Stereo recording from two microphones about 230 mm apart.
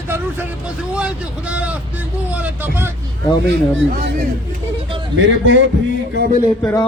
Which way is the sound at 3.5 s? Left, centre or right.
Right.